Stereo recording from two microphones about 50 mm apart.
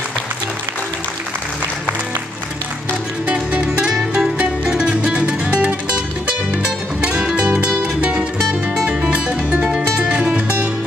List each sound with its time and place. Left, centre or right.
3.3 s music: right